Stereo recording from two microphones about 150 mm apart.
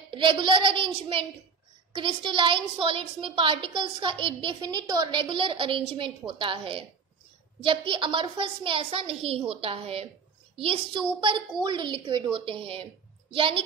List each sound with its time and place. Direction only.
0.1 s a woman's voice: 35° right (ahead or behind)